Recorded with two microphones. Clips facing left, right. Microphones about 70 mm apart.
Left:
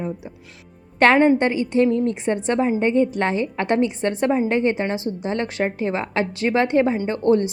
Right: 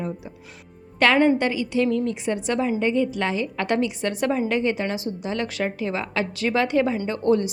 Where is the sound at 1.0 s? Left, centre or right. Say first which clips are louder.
Left 3 dB; left.